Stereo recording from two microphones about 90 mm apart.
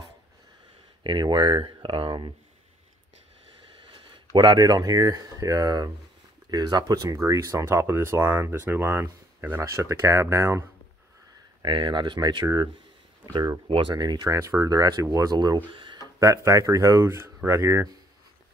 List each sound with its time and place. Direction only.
1.0 s speech: 60° right (ahead or behind)
3.8 s a sound: 75° right (ahead or behind)
4.3 s speech: 50° right (ahead or behind); by 10.6 s 30° right (ahead or behind)
11.6 s speech: 65° right (ahead or behind); by 13.6 s 50° right (ahead or behind)
13.7 s speech: 60° right (ahead or behind)
14.3 s speech: 40° right (ahead or behind)
15.7 s a sound: 65° right (ahead or behind)
16.2 s speech: 40° right (ahead or behind)